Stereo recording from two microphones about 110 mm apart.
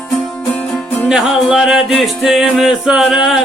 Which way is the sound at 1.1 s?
5° right (ahead or behind).